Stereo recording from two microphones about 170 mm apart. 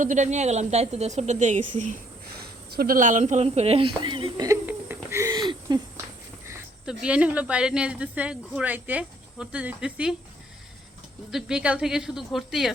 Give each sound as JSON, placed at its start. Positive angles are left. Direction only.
{"t": 0.0, "sound": "a woman's voice", "side_deg": -45}
{"t": 2.4, "sound": "speech", "side_deg": -60}
{"t": 4.6, "sound": "a sound", "side_deg": -15}
{"t": 6.8, "sound": "a woman's voice", "side_deg": -5}
{"t": 11.3, "sound": "speech", "side_deg": -5}